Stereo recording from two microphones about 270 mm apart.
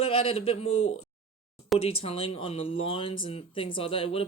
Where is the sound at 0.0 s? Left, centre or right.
Left.